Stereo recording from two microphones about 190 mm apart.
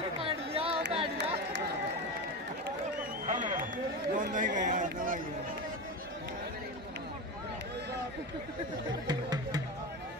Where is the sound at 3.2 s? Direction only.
40° right (ahead or behind).